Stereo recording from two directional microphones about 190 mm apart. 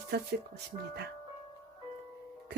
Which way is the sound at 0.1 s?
60° right (ahead or behind).